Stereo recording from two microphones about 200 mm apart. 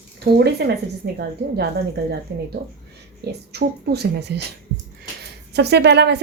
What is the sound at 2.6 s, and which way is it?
Speech, 50° right (ahead or behind).